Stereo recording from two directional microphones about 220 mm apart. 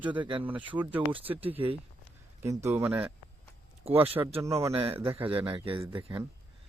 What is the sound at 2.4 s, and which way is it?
Speech, 10° right (ahead or behind).